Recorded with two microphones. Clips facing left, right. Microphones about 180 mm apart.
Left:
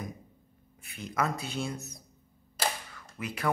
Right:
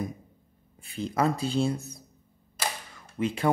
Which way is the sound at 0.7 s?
30° right (ahead or behind).